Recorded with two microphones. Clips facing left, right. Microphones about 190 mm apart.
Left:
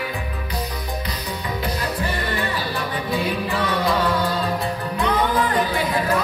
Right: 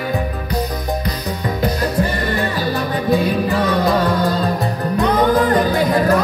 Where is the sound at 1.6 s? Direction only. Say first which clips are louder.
Right 8 dB; 45° right (ahead or behind).